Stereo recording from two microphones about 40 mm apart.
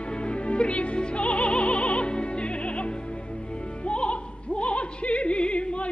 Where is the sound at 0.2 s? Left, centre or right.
Left.